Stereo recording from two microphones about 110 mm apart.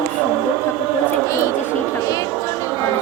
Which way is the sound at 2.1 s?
30° left (ahead or behind).